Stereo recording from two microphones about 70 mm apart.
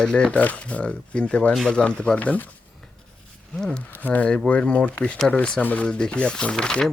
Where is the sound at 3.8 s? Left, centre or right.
Left; by 6.9 s centre.